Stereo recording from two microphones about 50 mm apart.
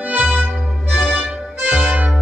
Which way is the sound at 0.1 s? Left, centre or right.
Right.